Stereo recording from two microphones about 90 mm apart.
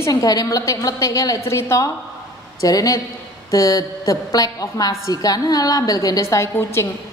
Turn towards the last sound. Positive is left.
turn(degrees=30)  # may be behind; listen again after turning